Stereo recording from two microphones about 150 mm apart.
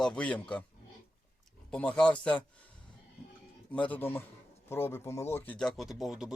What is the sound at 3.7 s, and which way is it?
Speech, 10° left (ahead or behind).